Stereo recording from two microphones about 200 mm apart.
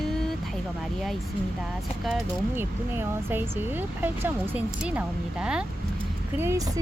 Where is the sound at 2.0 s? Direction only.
5° right (ahead or behind).